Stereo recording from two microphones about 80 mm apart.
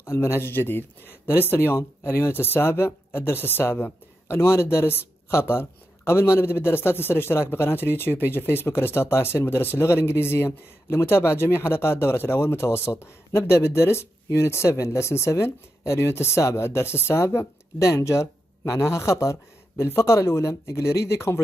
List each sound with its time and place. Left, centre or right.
0.0 s speech: left